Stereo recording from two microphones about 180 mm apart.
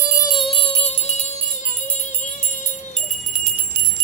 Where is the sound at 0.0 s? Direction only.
15° left (ahead or behind); by 1.3 s 40° left (ahead or behind).